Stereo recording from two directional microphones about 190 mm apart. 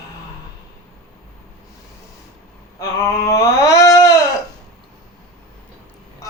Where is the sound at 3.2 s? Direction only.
15° left (ahead or behind).